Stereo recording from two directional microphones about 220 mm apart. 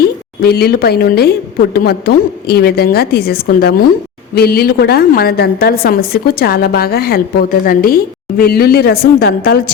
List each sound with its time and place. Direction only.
0.4 s a woman's voice: 45° left (ahead or behind)